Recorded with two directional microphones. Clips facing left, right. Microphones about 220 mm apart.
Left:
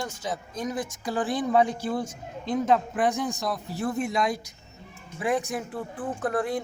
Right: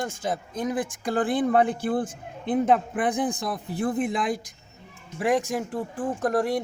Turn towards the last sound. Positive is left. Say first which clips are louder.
# right 3 dB
turn(degrees=-40)  # may be behind; listen again after turning